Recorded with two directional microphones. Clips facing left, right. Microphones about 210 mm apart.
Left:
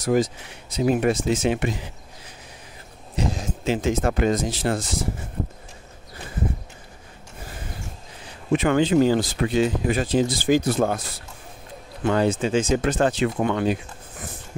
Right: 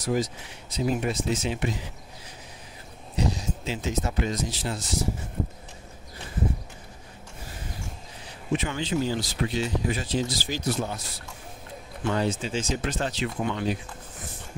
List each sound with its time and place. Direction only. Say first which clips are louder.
0.0 s speech: left 6 dB; 50° left (ahead or behind)
0.7 s speech: left 6 dB; 65° left (ahead or behind)
3.3 s a sound: left 2 dB; 50° left (ahead or behind)
3.6 s speech: left 9 dB; 55° left (ahead or behind)
8.5 s speech: left 10 dB; 55° left (ahead or behind)
12.1 s speech: left 6 dB; 55° left (ahead or behind)